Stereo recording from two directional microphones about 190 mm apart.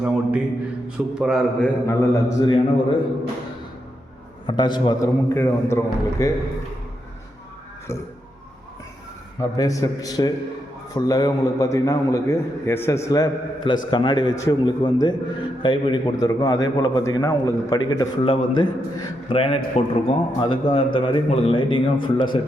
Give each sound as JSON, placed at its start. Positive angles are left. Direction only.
{"t": 0.0, "sound": "speech", "side_deg": -5}
{"t": 1.9, "sound": "a man's voice", "side_deg": 20}
{"t": 4.4, "sound": "a man's voice", "side_deg": 25}
{"t": 9.4, "sound": "a man's voice", "side_deg": 15}